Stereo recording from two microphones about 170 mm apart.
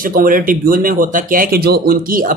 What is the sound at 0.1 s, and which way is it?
Speech, 55° right (ahead or behind).